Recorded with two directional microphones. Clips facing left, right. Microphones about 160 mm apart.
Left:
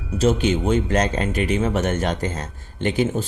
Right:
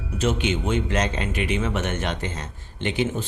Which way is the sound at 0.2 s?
40° left (ahead or behind).